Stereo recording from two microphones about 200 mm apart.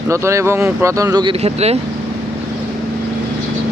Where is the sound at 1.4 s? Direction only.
30° right (ahead or behind).